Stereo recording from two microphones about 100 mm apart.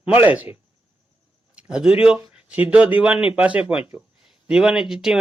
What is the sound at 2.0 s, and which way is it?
Speech, 10° right (ahead or behind).